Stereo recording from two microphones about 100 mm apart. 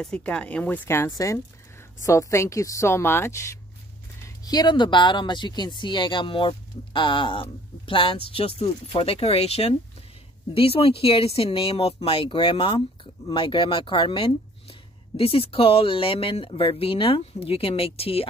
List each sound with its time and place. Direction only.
0.0 s speech: 10° left (ahead or behind)
0.8 s a woman's voice: 25° left (ahead or behind)
4.5 s speech: 45° left (ahead or behind); by 9.8 s 85° left
10.5 s speech: 75° left (ahead or behind)